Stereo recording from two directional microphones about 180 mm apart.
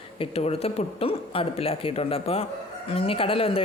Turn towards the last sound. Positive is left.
turn(degrees=30)  # may be behind; listen again after turning